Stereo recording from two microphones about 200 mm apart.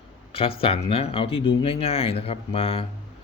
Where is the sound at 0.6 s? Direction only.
30° left (ahead or behind).